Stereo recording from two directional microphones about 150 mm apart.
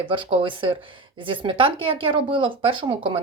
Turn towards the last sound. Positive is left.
turn(degrees=-35)  # may be behind; listen again after turning